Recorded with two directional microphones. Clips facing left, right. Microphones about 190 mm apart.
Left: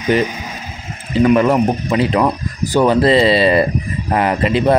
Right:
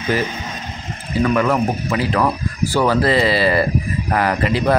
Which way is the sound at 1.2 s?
25° left (ahead or behind).